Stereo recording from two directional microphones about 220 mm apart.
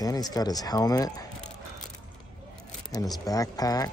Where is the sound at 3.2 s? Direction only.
15° left (ahead or behind).